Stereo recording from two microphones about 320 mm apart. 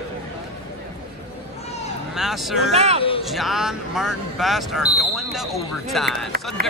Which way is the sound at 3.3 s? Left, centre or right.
Centre.